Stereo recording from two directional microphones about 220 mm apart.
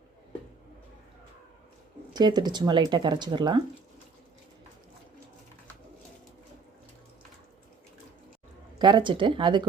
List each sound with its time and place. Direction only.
2.1 s speech: 20° right (ahead or behind)
8.8 s speech: 20° right (ahead or behind)